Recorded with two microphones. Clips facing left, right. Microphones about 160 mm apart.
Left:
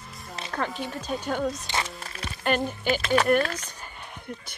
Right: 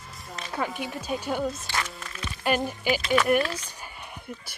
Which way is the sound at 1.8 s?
35° left (ahead or behind).